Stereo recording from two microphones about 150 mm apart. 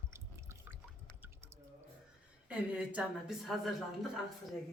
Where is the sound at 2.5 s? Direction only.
10° right (ahead or behind).